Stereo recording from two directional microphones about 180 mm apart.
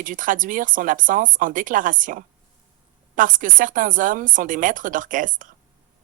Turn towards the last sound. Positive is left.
turn(degrees=-45)  # may be behind; listen again after turning